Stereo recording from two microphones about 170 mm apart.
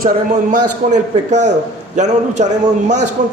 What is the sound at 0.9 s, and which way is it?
A man's voice, 45° right (ahead or behind).